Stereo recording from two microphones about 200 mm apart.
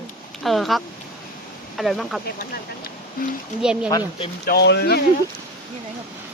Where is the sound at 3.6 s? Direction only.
5° right (ahead or behind).